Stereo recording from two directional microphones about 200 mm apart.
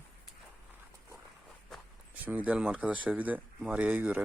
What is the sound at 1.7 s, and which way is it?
Speech, 10° right (ahead or behind).